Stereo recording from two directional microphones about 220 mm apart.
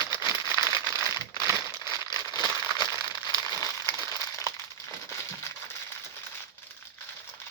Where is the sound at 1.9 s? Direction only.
20° left (ahead or behind).